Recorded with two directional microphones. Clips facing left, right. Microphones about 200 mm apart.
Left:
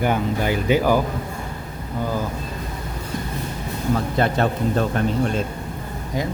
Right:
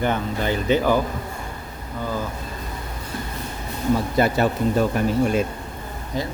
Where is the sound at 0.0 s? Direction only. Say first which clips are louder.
Left 2 dB; 10° left (ahead or behind).